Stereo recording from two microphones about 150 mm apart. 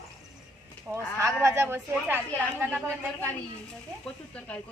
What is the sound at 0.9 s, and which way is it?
Speech, 10° right (ahead or behind).